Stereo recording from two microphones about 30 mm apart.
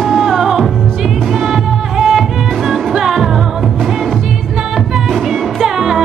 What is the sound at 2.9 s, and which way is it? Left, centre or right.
Music, centre.